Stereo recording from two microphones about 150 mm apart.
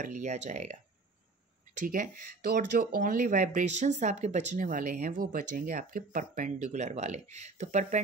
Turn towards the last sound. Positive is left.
turn(degrees=-50)  # may be behind; listen again after turning